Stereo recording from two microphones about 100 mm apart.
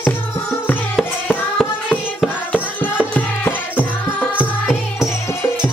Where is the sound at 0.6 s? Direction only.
15° left (ahead or behind).